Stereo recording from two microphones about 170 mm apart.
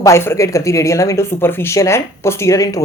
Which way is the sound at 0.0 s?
15° left (ahead or behind).